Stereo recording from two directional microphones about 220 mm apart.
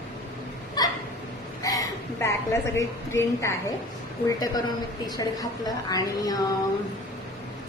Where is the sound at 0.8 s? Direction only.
20° left (ahead or behind).